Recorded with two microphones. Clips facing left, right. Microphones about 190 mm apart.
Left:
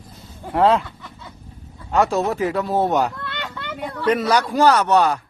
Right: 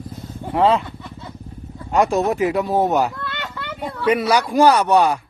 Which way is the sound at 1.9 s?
15° right (ahead or behind).